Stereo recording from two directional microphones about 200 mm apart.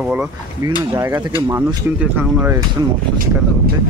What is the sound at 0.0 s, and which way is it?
Speech, 5° right (ahead or behind).